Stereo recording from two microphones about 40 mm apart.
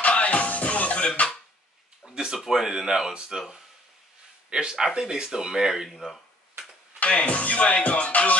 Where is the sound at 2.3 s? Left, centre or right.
Centre.